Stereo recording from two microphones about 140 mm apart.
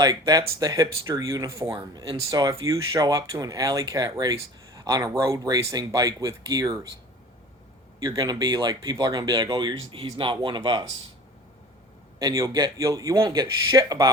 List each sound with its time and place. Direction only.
0.0 s speech: 30° right (ahead or behind)
7.9 s speech: 25° right (ahead or behind)
12.2 s speech: 25° right (ahead or behind)